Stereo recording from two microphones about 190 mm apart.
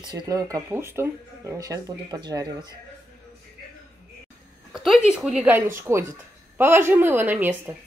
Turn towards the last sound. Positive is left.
turn(degrees=-10)  # may be behind; listen again after turning